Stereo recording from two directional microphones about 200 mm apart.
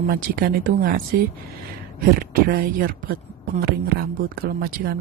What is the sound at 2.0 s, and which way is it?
Speech, 45° right (ahead or behind).